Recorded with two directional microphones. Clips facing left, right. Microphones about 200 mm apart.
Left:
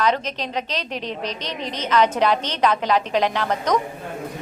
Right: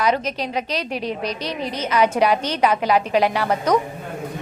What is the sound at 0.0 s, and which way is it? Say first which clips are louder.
A woman's voice: right 1 dB; 10° right (ahead or behind).